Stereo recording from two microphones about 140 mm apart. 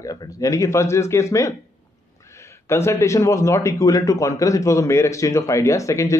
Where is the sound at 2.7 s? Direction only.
20° left (ahead or behind).